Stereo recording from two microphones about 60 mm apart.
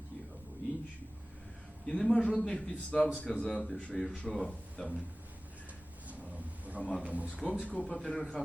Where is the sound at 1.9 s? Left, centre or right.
Centre.